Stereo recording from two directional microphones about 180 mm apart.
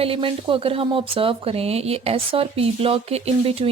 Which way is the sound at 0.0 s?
30° right (ahead or behind).